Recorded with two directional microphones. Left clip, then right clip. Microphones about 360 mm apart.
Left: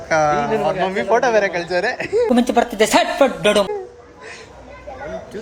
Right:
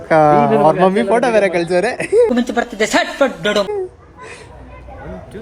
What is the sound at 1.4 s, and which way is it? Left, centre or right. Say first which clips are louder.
Speech: right 4 dB; right.